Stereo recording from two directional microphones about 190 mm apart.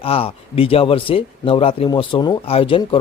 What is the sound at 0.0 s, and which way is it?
Speech, 30° left (ahead or behind).